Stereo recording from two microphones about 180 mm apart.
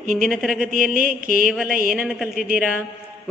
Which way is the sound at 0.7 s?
50° right (ahead or behind).